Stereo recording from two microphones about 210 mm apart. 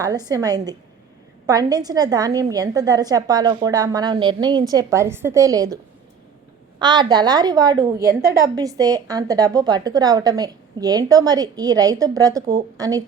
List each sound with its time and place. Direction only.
0.0 s a woman's voice: 20° right (ahead or behind)